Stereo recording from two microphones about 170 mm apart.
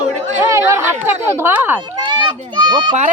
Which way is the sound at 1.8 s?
25° right (ahead or behind).